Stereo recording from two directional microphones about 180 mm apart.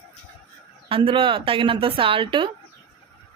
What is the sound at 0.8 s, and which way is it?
Speech, 30° right (ahead or behind).